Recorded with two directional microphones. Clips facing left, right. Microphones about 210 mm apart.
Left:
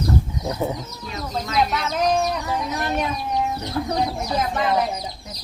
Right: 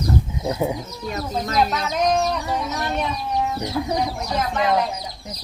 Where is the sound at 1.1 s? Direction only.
40° right (ahead or behind).